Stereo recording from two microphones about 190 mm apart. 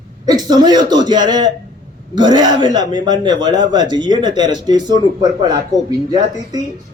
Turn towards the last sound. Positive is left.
turn(degrees=-20)  # may be behind; listen again after turning